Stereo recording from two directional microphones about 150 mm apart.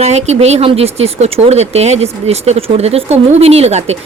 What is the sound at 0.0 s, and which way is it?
Speech, 45° right (ahead or behind).